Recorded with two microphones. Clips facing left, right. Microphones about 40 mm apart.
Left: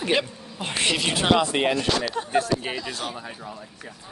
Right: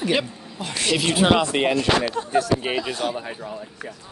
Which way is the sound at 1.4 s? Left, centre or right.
Right.